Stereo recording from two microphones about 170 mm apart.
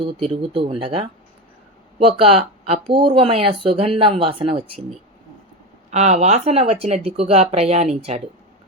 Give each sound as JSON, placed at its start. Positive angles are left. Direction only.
{"t": 0.0, "sound": "speech", "side_deg": -30}
{"t": 5.9, "sound": "speech", "side_deg": -45}